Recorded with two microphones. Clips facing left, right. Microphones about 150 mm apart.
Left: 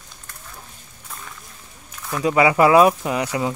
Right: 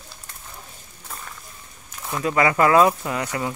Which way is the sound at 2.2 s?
15° left (ahead or behind).